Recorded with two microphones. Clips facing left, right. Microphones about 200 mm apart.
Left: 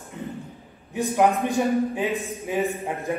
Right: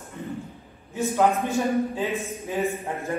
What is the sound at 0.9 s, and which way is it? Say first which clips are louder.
A man's voice: left 1 dB; 15° left (ahead or behind).